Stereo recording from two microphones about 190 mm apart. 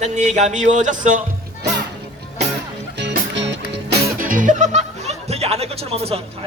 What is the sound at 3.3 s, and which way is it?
Music, 70° right (ahead or behind).